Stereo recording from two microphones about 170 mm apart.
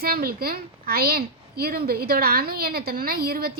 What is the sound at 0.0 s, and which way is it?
A woman's voice, 65° right (ahead or behind).